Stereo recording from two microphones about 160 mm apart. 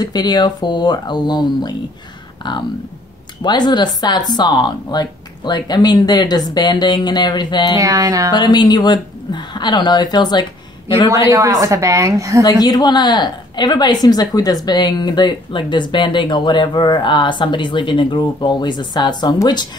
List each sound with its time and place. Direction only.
0.0 s speech: 25° left (ahead or behind)
3.4 s speech: 25° left (ahead or behind)
7.7 s a woman's voice: 20° right (ahead or behind)
8.4 s speech: 25° left (ahead or behind)
11.1 s a woman's voice: 20° right (ahead or behind)
12.4 s speech: 25° left (ahead or behind)